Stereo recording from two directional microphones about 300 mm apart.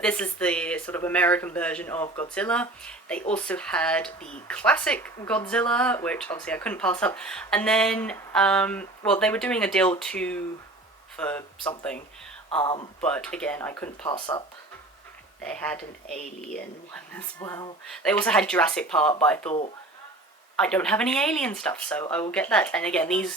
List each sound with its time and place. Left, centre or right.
0.0 s speech: centre
12.5 s speech: centre
13.0 s speech: centre
15.4 s speech: centre
19.5 s speech: left
20.6 s speech: centre